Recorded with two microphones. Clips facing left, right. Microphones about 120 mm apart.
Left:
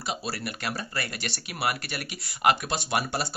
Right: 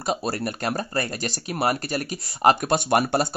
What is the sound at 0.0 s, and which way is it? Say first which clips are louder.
Speech: right 7 dB; 45° right (ahead or behind).